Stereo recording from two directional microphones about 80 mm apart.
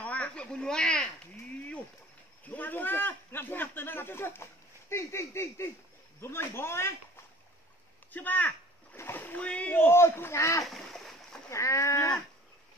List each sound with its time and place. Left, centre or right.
0.0 s speech: centre
2.4 s a man's voice: left
8.1 s a man's voice: left
9.8 s a man's voice: left
10.6 s boat: centre
11.5 s a man's voice: left